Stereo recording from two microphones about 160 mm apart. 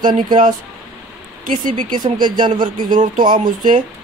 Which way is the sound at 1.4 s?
55° right (ahead or behind).